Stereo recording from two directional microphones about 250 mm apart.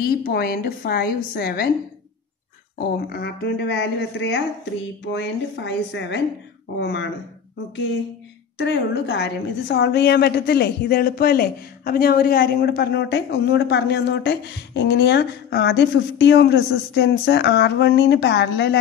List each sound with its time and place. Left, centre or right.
0.3 s a woman's voice: left
3.1 s a woman's voice: left
8.5 s a woman's voice: left